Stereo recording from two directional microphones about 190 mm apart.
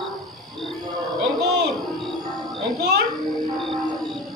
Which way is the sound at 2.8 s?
65° right (ahead or behind).